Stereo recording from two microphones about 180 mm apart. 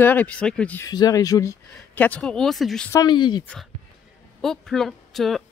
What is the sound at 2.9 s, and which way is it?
Speech, 20° left (ahead or behind).